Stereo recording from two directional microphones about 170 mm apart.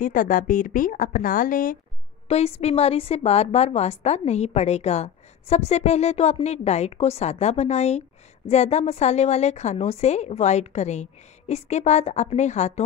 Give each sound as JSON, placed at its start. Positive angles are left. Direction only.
{"t": 0.0, "sound": "a woman's voice", "side_deg": 50}
{"t": 2.2, "sound": "a woman's voice", "side_deg": 40}